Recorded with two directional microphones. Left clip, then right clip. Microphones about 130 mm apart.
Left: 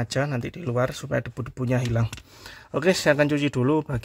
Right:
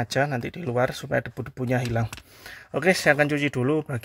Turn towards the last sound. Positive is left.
turn(degrees=5)  # may be behind; listen again after turning